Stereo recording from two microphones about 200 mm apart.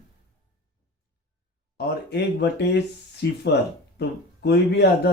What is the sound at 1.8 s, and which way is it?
Speech, 55° left (ahead or behind).